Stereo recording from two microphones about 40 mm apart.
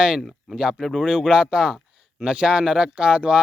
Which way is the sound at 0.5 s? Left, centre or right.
Right.